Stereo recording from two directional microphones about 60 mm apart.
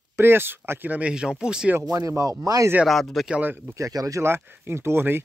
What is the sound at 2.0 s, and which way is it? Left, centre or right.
Speech, right.